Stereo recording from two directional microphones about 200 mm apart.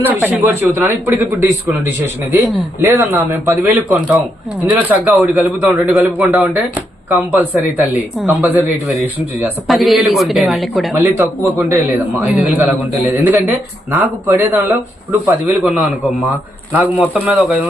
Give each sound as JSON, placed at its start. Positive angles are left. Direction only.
{"t": 0.0, "sound": "a man's voice", "side_deg": -10}
{"t": 10.9, "sound": "a man's voice", "side_deg": -10}
{"t": 13.9, "sound": "a man's voice", "side_deg": -15}
{"t": 15.4, "sound": "a man's voice", "side_deg": -5}